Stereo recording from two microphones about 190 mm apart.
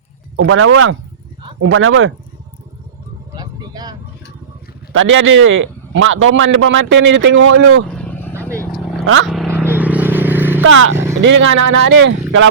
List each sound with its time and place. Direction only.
0.3 s a man's voice: 90° right
3.3 s vehicle: 20° right (ahead or behind)
4.9 s a man's voice: 90° right
7.9 s vehicle: 10° left (ahead or behind)
9.6 s vehicle: 10° right (ahead or behind)
10.6 s speech: 90° right
10.9 s vehicle: 15° right (ahead or behind)
11.2 s speech: 75° right (ahead or behind)